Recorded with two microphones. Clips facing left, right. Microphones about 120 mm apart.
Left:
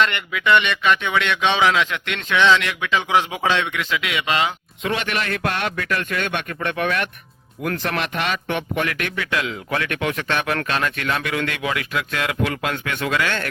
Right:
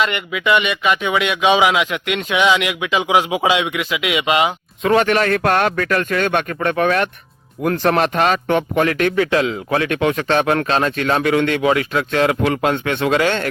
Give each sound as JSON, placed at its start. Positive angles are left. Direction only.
{"t": 0.0, "sound": "speech", "side_deg": -5}
{"t": 4.8, "sound": "speech", "side_deg": -40}